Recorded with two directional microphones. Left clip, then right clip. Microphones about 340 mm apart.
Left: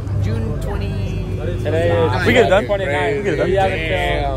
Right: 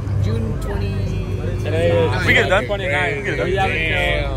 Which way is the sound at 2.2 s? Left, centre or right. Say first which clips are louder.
Left 4 dB; centre.